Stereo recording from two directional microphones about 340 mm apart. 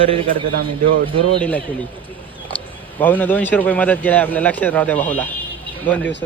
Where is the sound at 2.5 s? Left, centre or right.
Centre.